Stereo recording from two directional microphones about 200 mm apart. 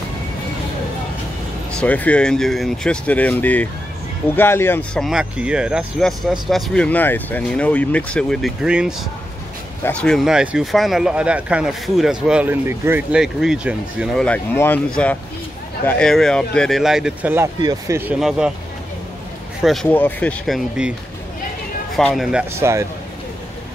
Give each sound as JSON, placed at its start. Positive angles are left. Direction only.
{"t": 1.8, "sound": "speech", "side_deg": 5}
{"t": 5.0, "sound": "speech", "side_deg": -5}
{"t": 19.6, "sound": "speech", "side_deg": 0}
{"t": 21.9, "sound": "speech", "side_deg": 0}